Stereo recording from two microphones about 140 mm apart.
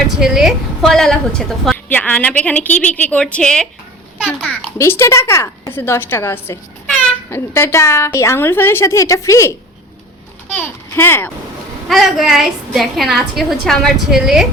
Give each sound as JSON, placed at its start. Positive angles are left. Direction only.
{"t": 0.2, "sound": "a woman's voice", "side_deg": -5}
{"t": 4.4, "sound": "a woman's voice", "side_deg": 15}
{"t": 11.9, "sound": "a woman's voice", "side_deg": 0}